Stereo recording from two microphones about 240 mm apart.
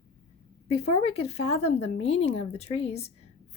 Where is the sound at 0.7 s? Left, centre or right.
Left.